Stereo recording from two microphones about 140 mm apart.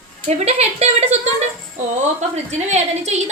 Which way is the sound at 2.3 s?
55° right (ahead or behind).